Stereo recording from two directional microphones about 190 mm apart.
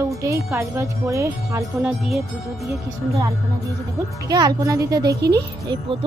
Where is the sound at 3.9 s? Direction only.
20° right (ahead or behind).